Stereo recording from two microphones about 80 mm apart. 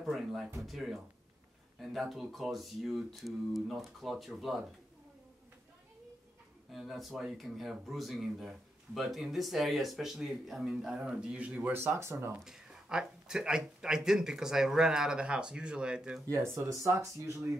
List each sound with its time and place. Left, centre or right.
0.0 s speech: centre
6.7 s speech: centre
11.7 s speech: right
12.4 s speech: centre
16.3 s speech: right